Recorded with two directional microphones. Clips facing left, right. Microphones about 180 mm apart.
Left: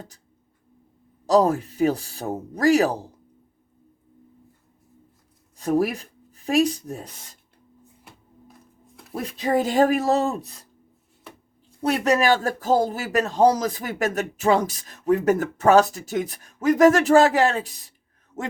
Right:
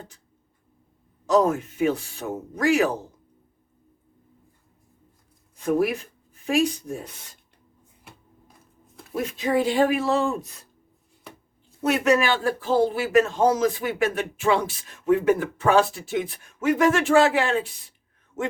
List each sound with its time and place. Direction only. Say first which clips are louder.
1.3 s speech: left 2 dB; 35° left (ahead or behind)
5.5 s speech: left 1 dB; 40° left (ahead or behind)
9.1 s speech: even; 35° left (ahead or behind)
11.8 s a man's voice: even; 35° left (ahead or behind)